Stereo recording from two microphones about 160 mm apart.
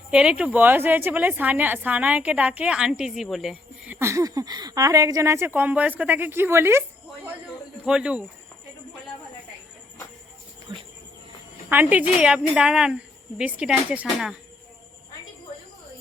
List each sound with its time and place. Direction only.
0.1 s a woman's voice: 5° right (ahead or behind)
7.9 s speech: 5° right (ahead or behind)
10.7 s insect: 30° right (ahead or behind)
11.7 s a woman's voice: 10° right (ahead or behind)